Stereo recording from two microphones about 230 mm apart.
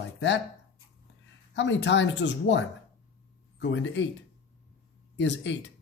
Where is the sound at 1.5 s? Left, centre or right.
Left.